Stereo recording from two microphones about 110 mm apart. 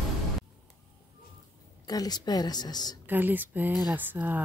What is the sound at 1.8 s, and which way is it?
Speech, 35° left (ahead or behind).